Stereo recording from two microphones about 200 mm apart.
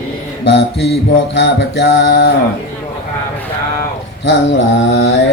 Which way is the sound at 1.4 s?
60° left (ahead or behind).